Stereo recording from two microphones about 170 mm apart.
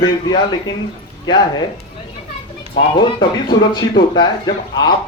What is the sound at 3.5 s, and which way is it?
Speech, 25° left (ahead or behind).